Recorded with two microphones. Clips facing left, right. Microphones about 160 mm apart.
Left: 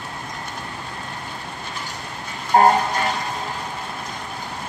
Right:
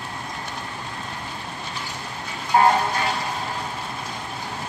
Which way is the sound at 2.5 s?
40° left (ahead or behind).